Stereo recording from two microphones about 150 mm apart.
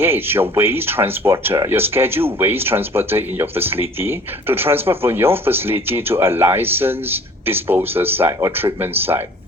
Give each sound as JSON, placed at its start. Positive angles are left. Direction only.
{"t": 0.0, "sound": "speech", "side_deg": -15}